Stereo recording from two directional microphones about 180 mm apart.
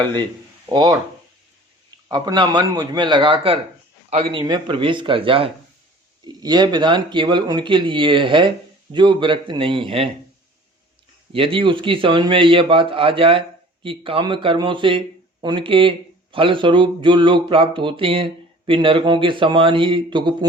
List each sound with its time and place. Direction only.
0.0 s speech: 25° right (ahead or behind)
2.0 s speech: 25° right (ahead or behind)
11.3 s speech: 30° right (ahead or behind)